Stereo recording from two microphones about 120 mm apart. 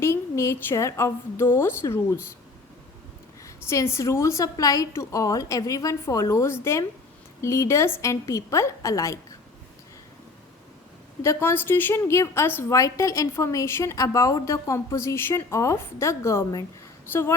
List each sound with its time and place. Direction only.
0.0 s a woman's voice: 25° left (ahead or behind)
3.4 s a woman's voice: 25° left (ahead or behind)
11.2 s a woman's voice: 20° left (ahead or behind)